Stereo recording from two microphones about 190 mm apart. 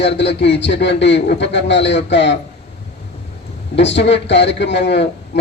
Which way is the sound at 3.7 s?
65° left (ahead or behind).